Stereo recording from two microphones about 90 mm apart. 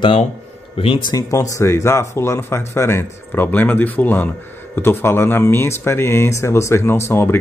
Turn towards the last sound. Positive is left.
turn(degrees=25)  # may be behind; listen again after turning